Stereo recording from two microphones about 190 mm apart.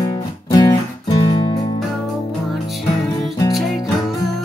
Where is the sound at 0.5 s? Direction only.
20° left (ahead or behind).